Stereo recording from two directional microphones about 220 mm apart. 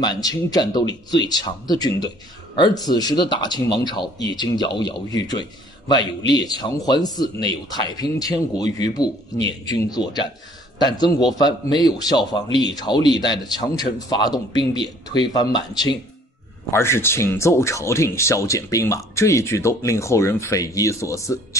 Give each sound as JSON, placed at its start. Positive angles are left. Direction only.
{"t": 0.0, "sound": "speech", "side_deg": 20}
{"t": 6.6, "sound": "speech", "side_deg": 20}